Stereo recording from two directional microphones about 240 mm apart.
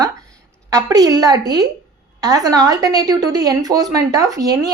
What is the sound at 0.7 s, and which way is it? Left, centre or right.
Speech, centre.